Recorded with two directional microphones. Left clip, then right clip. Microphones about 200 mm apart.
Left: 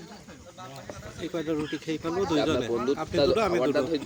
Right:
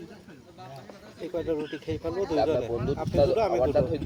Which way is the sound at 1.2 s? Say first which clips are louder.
Right 1 dB; 30° left (ahead or behind).